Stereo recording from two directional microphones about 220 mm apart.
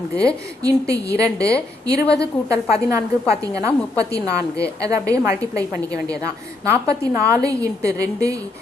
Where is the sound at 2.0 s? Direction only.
50° left (ahead or behind).